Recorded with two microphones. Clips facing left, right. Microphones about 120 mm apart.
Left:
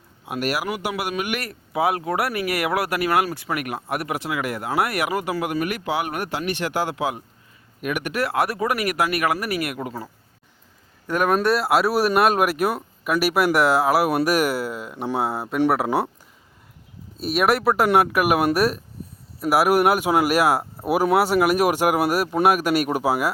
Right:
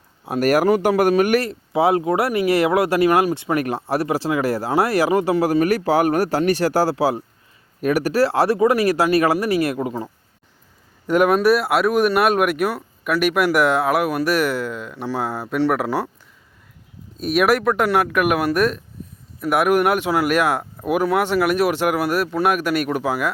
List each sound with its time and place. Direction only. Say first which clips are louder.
0.3 s speech: right 9 dB; 40° right (ahead or behind)
1.4 s speech: right 5 dB; 25° right (ahead or behind)
11.3 s speech: right 3 dB; centre (ahead or behind)
17.2 s speech: right 3 dB; centre (ahead or behind)